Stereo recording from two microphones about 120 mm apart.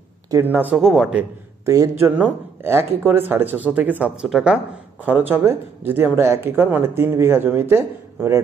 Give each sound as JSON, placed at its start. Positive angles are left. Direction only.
{"t": 0.3, "sound": "speech", "side_deg": -20}
{"t": 0.7, "sound": "speech", "side_deg": -5}
{"t": 1.7, "sound": "speech", "side_deg": -25}
{"t": 5.3, "sound": "speech", "side_deg": -15}